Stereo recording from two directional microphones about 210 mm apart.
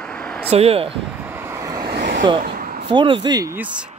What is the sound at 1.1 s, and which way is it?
Vehicle, 10° right (ahead or behind).